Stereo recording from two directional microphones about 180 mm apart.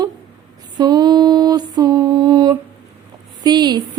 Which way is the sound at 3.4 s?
25° right (ahead or behind).